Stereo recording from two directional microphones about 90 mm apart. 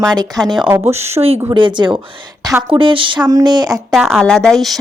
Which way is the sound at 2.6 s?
80° right.